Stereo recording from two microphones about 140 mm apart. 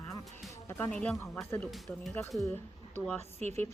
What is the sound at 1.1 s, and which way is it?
Speech, 20° left (ahead or behind).